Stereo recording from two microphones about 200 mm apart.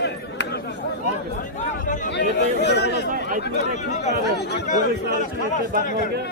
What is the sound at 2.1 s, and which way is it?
Speech, 55° left (ahead or behind).